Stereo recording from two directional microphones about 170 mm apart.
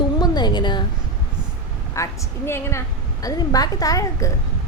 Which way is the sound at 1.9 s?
20° left (ahead or behind).